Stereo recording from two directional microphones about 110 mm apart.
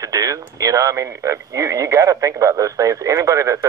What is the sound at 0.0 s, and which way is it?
Speech, 30° right (ahead or behind).